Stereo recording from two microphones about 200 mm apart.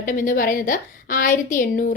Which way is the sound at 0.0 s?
45° left (ahead or behind).